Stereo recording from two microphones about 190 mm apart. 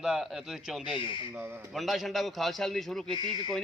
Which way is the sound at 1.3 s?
10° right (ahead or behind).